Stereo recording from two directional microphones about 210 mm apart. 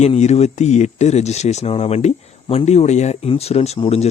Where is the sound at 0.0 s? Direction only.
30° left (ahead or behind).